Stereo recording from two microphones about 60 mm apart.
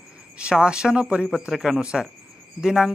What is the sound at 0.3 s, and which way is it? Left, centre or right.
Speech, centre.